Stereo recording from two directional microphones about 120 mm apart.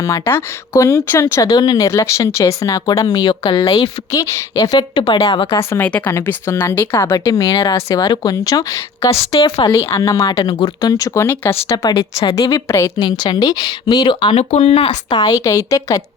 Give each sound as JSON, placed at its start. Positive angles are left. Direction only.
{"t": 0.0, "sound": "speech", "side_deg": 20}
{"t": 4.1, "sound": "a woman's voice", "side_deg": 25}
{"t": 4.9, "sound": "a woman's voice", "side_deg": 50}
{"t": 5.5, "sound": "speech", "side_deg": 20}
{"t": 9.1, "sound": "a woman's voice", "side_deg": 55}
{"t": 9.7, "sound": "speech", "side_deg": 25}
{"t": 11.9, "sound": "a woman's voice", "side_deg": 35}
{"t": 14.3, "sound": "speech", "side_deg": 60}
{"t": 15.1, "sound": "speech", "side_deg": 30}